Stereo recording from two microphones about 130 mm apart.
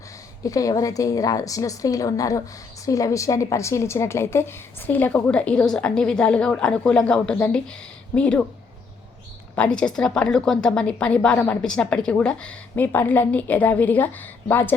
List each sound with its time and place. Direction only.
0.4 s a woman's voice: 25° left (ahead or behind); by 8.4 s 10° left (ahead or behind)
9.6 s a woman's voice: 5° left (ahead or behind)